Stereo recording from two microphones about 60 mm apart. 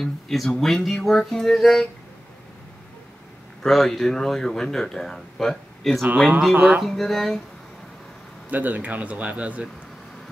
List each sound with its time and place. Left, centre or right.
0.0 s speech: centre
3.6 s speech: centre
6.5 s speech: right
6.8 s speech: centre
8.5 s speech: right